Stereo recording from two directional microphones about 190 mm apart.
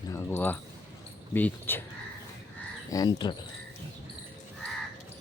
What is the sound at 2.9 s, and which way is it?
Speech, 20° left (ahead or behind).